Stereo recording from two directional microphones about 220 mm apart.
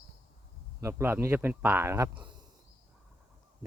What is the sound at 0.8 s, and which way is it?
Speech, 10° right (ahead or behind).